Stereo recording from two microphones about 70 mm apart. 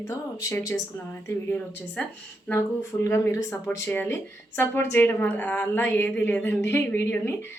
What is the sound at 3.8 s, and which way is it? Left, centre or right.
Speech, left.